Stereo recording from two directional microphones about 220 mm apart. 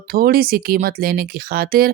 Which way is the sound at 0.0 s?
40° right (ahead or behind).